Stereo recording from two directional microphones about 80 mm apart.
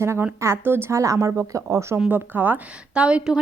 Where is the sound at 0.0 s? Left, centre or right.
Right.